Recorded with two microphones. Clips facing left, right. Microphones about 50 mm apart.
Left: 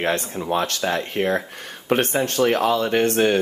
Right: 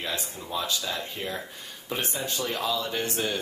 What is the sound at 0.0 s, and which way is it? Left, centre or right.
Speech, left.